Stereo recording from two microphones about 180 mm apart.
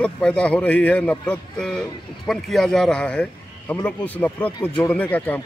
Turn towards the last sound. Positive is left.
turn(degrees=10)  # may be behind; listen again after turning